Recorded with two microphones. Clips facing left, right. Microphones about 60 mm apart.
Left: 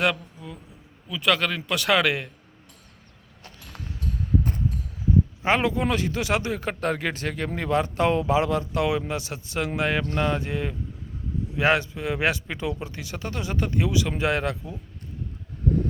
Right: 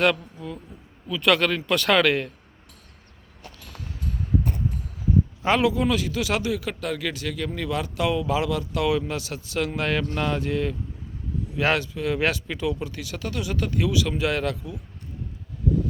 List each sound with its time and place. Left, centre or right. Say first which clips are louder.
0.0 s a sound: right 3 dB; centre
1.0 s speech: right 3 dB; centre
5.4 s a man's voice: right 4 dB; left